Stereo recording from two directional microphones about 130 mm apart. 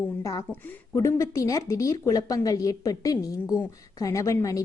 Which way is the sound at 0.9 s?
25° left (ahead or behind).